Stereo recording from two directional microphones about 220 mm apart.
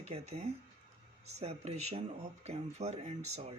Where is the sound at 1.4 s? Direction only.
30° right (ahead or behind).